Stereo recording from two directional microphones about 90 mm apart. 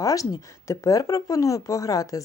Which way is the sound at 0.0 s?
40° left (ahead or behind).